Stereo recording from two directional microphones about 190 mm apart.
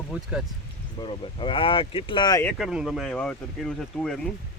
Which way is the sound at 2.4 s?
5° left (ahead or behind).